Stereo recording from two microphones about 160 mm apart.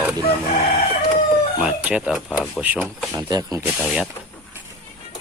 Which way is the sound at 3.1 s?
20° right (ahead or behind).